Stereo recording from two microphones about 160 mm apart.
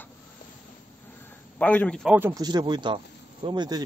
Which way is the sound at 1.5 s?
10° left (ahead or behind).